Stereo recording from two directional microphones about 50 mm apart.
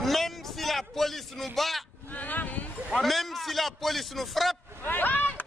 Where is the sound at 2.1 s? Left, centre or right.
Left.